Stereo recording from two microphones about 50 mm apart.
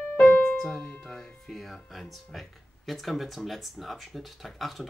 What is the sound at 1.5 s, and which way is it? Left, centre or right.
Speech, centre.